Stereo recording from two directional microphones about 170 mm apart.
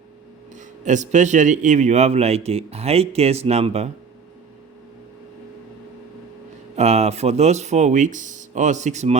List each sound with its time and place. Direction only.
0.5 s speech: 45° right (ahead or behind)
6.7 s speech: 40° right (ahead or behind)